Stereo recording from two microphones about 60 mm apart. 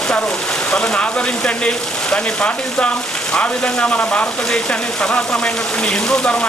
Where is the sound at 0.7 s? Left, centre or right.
Centre.